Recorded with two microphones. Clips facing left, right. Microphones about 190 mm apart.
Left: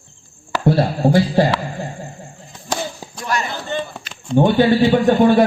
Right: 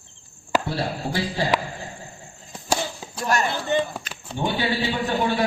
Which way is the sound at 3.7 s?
15° right (ahead or behind).